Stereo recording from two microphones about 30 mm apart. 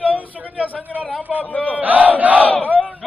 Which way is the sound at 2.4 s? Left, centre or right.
Left.